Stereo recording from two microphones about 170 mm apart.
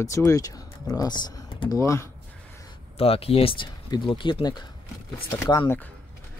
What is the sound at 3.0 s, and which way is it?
Speech, 35° left (ahead or behind).